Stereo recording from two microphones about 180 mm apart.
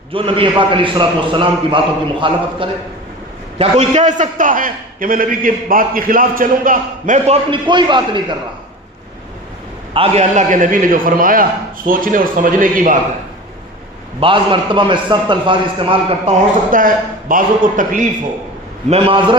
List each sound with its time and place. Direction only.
0.1 s a man's voice: 30° right (ahead or behind)
3.6 s a man's voice: 40° right (ahead or behind)
7.5 s a man's voice: 25° right (ahead or behind)
9.9 s a man's voice: 35° right (ahead or behind)
14.2 s a man's voice: 30° right (ahead or behind)
16.7 s a man's voice: 50° right (ahead or behind)
18.9 s a man's voice: 30° right (ahead or behind)